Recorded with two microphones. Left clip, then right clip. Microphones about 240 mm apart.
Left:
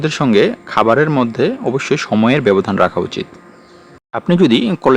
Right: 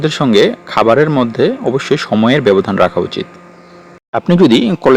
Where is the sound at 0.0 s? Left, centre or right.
Centre.